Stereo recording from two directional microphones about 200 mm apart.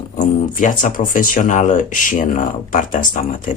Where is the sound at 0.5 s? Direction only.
40° left (ahead or behind).